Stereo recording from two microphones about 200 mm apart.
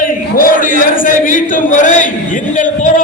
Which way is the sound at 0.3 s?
45° left (ahead or behind).